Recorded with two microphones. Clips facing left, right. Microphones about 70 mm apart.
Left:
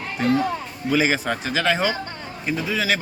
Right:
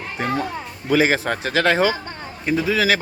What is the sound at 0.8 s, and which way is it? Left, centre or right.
Speech, right.